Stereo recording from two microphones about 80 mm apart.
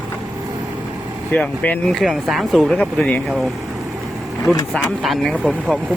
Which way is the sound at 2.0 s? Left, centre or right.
Centre.